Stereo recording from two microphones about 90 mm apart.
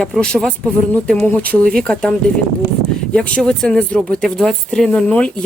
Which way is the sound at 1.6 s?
10° left (ahead or behind).